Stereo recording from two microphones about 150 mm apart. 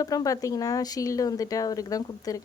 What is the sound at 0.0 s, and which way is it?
Speech, 25° left (ahead or behind).